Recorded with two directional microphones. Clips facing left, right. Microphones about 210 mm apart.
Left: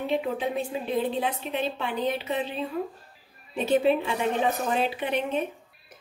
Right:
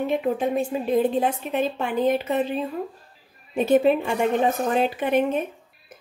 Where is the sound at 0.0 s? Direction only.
45° right (ahead or behind).